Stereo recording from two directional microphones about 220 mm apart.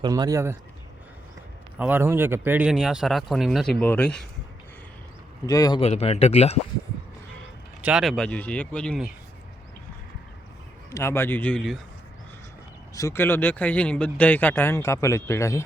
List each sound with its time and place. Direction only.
0.0 s speech: 15° right (ahead or behind)
1.8 s speech: 10° right (ahead or behind)
5.5 s speech: 15° left (ahead or behind)
5.8 s speech: 30° left (ahead or behind)
7.8 s speech: 5° right (ahead or behind)
10.9 s speech: 10° left (ahead or behind)
12.9 s speech: 15° left (ahead or behind)